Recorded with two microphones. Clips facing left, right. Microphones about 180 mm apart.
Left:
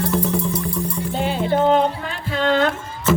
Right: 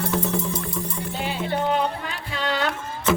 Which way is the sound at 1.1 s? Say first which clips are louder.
Left 7 dB; 45° left (ahead or behind).